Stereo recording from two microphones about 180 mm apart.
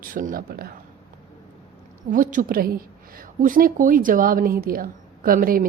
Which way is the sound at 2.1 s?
50° right (ahead or behind).